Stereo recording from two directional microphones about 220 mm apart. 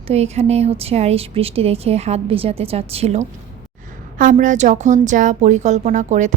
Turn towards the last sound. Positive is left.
turn(degrees=-35)  # may be behind; listen again after turning